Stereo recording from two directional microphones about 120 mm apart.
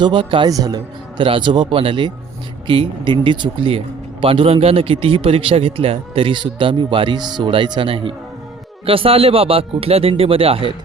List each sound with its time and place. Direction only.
0.0 s speech: 45° right (ahead or behind)
0.5 s speech: 30° right (ahead or behind)
1.2 s speech: 45° right (ahead or behind)